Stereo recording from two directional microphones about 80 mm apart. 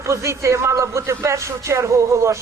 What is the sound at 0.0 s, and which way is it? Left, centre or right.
Speech, right.